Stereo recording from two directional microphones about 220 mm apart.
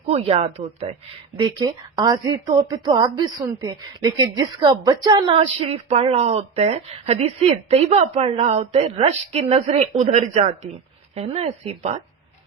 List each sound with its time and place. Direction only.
0.1 s a woman's voice: 30° right (ahead or behind)